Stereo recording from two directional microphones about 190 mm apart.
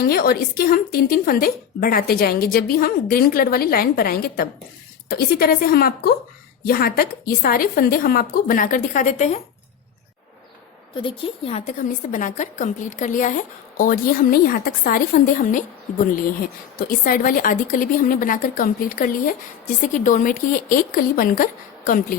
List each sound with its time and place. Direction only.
0.0 s a woman's voice: 50° left (ahead or behind)
10.9 s a woman's voice: 25° left (ahead or behind); by 15.6 s 45° left (ahead or behind)
16.7 s a woman's voice: 50° left (ahead or behind)